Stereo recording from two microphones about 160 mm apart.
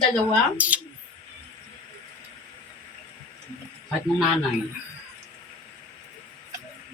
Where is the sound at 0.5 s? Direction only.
10° right (ahead or behind).